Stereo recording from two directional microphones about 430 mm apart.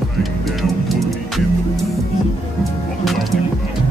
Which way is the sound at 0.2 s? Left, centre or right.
Centre.